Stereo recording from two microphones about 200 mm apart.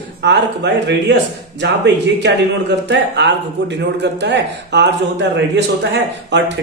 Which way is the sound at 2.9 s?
60° right (ahead or behind).